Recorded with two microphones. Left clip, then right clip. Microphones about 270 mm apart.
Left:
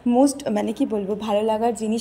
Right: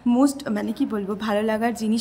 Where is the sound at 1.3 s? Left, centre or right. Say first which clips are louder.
Left 3 dB; right.